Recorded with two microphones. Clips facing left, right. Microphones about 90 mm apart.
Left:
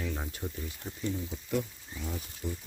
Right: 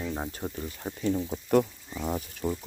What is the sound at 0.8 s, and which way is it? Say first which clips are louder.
Speech: right 7 dB; 65° right (ahead or behind).